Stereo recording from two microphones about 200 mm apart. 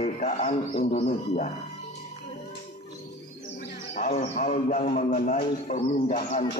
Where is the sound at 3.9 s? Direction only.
35° left (ahead or behind).